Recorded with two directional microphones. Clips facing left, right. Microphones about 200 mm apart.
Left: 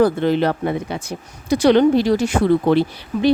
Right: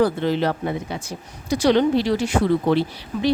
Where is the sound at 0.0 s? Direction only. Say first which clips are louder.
Left 4 dB; 55° left (ahead or behind).